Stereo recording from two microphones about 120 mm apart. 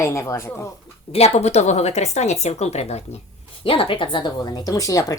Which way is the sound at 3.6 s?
45° left (ahead or behind).